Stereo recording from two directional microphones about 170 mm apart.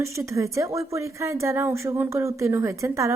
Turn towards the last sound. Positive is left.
turn(degrees=-15)  # may be behind; listen again after turning